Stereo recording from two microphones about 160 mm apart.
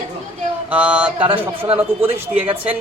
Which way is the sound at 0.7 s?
10° right (ahead or behind).